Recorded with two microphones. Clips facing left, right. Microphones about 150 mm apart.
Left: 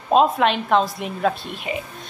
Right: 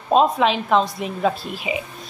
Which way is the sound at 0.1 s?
Centre (ahead or behind).